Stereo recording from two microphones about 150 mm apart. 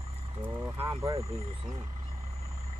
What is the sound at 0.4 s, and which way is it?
Speech, 15° right (ahead or behind).